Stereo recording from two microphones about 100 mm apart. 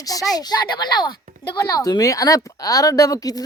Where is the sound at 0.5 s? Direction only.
45° left (ahead or behind).